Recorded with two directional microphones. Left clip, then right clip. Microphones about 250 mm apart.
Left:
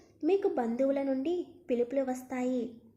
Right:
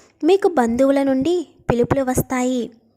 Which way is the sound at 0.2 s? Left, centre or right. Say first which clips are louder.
Right 13 dB; right.